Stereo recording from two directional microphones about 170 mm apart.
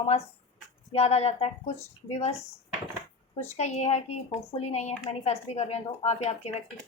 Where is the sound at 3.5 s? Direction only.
40° left (ahead or behind).